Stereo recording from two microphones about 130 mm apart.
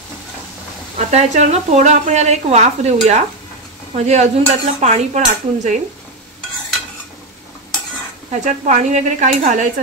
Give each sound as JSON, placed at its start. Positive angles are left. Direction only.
{"t": 0.9, "sound": "speech", "side_deg": -65}
{"t": 8.3, "sound": "speech", "side_deg": -70}